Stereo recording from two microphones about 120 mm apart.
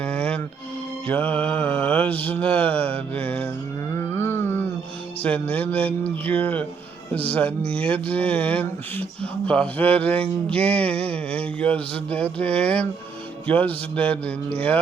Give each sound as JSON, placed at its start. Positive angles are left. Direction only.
{"t": 0.0, "sound": "music", "side_deg": 10}
{"t": 1.0, "sound": "speech", "side_deg": 15}
{"t": 3.9, "sound": "a sound", "side_deg": 20}
{"t": 5.2, "sound": "speech", "side_deg": 15}